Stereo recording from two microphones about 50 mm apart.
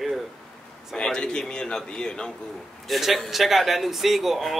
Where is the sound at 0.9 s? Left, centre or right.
Centre.